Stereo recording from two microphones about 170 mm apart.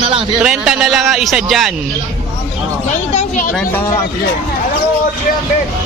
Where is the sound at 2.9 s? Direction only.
45° left (ahead or behind).